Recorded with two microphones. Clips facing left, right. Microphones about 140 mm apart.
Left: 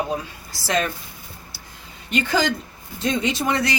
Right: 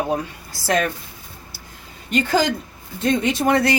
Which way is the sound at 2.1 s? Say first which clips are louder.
Right 2 dB; 40° right (ahead or behind).